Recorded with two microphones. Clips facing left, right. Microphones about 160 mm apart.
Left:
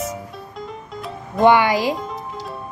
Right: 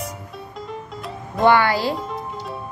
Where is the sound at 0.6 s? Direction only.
Centre (ahead or behind).